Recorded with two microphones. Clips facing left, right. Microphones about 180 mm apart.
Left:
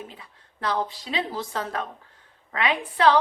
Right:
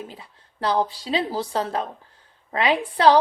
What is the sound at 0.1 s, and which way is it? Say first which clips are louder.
Speech: right 4 dB; 30° right (ahead or behind).